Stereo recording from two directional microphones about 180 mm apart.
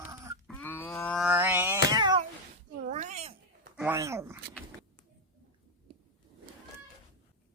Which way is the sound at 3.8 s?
15° right (ahead or behind).